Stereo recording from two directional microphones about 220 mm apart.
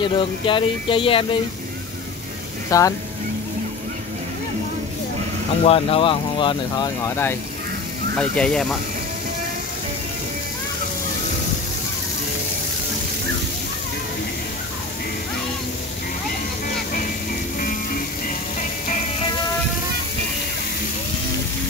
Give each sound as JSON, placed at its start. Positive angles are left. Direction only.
{"t": 0.0, "sound": "speech", "side_deg": 20}
{"t": 2.7, "sound": "speech", "side_deg": 15}
{"t": 5.7, "sound": "speech", "side_deg": 25}
{"t": 8.2, "sound": "speech", "side_deg": 5}
{"t": 17.6, "sound": "music", "side_deg": 40}